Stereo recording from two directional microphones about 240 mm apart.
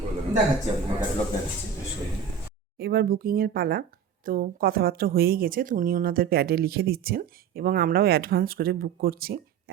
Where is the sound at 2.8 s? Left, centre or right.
Right.